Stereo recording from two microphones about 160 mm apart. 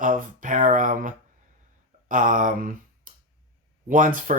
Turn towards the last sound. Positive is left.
turn(degrees=-55)  # may be behind; listen again after turning